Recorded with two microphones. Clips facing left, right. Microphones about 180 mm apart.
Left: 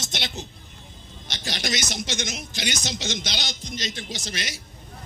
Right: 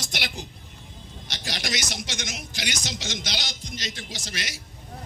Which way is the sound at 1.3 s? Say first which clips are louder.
Left 2 dB; 25° left (ahead or behind).